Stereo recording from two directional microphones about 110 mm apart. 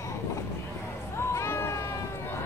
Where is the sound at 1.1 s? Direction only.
25° left (ahead or behind).